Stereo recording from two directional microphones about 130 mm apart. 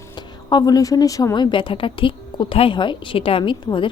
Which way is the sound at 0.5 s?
30° left (ahead or behind).